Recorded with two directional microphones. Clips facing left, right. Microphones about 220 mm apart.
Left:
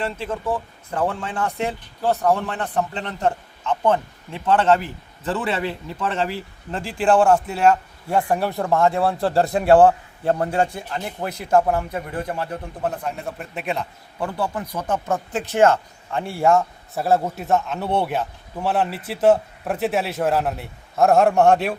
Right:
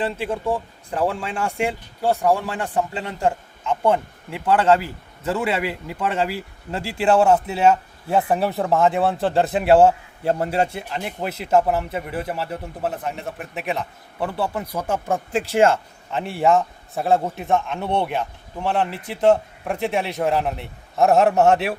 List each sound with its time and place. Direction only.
0.0 s speech: 15° right (ahead or behind)
9.7 s a man's voice: 25° right (ahead or behind)
10.7 s speech: 10° right (ahead or behind)